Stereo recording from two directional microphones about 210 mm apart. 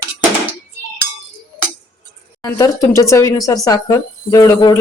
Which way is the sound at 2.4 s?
15° left (ahead or behind).